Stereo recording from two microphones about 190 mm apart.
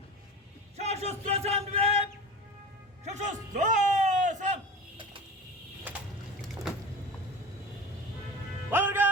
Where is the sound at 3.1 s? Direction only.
40° right (ahead or behind).